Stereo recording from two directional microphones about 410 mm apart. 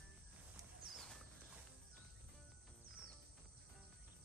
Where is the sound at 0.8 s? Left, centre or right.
Centre.